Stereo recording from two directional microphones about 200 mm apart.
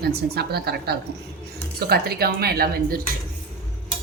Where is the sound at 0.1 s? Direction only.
55° right (ahead or behind).